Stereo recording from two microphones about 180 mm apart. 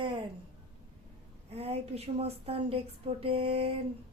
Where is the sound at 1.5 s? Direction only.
35° right (ahead or behind).